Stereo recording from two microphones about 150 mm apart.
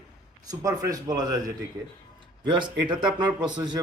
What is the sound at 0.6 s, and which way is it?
A man's voice, 25° right (ahead or behind).